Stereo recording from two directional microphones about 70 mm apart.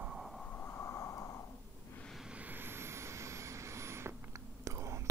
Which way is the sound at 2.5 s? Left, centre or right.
Right.